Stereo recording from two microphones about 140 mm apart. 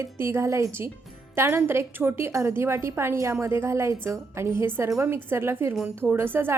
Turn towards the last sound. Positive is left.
turn(degrees=-15)  # may be behind; listen again after turning